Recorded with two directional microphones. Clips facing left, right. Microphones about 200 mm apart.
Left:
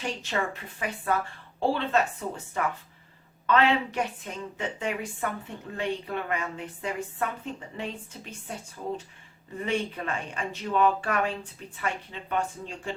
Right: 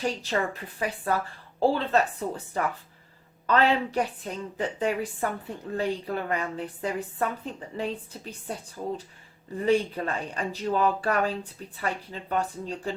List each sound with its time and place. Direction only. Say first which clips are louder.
0.0 s a woman's voice: right 3 dB; 35° right (ahead or behind)
9.6 s a woman's voice: right 6 dB; 35° right (ahead or behind)